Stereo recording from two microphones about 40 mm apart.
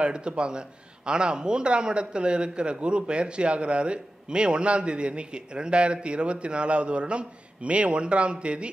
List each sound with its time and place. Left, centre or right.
0.0 s a man's voice: right